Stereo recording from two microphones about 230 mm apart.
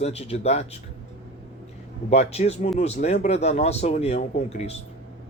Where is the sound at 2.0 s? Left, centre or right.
Left.